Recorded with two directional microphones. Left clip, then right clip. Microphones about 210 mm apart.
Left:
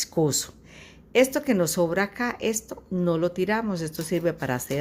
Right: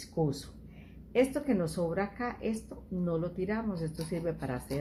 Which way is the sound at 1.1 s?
50° left (ahead or behind).